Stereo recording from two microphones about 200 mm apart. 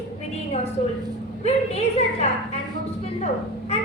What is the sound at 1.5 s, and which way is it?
A woman's voice, 30° left (ahead or behind).